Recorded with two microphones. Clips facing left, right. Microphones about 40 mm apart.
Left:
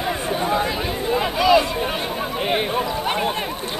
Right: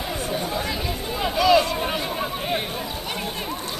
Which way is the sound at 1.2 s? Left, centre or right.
Centre.